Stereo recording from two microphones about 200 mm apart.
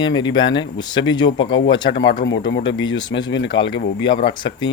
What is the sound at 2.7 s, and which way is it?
Speech, 75° left (ahead or behind).